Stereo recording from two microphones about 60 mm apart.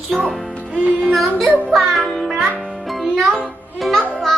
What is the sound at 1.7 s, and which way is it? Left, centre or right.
Music, centre.